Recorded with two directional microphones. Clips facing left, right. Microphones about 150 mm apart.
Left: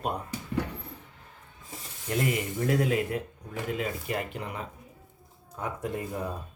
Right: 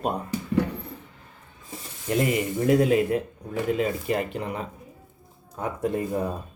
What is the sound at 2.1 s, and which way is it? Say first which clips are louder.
Speech: right 5 dB; 20° right (ahead or behind).